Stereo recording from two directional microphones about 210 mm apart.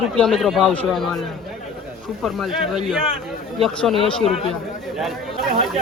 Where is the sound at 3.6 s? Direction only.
Centre (ahead or behind).